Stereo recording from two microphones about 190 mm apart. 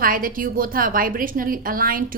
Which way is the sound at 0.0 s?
50° right (ahead or behind).